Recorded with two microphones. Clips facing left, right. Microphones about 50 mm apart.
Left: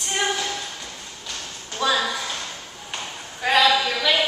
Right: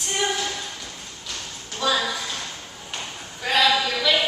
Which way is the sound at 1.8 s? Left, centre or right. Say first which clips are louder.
Left 1 dB; centre.